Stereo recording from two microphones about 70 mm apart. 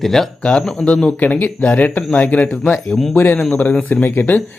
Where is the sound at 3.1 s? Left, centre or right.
Left.